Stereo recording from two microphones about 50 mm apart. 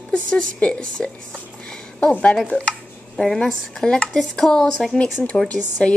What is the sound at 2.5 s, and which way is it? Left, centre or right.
Speech, right.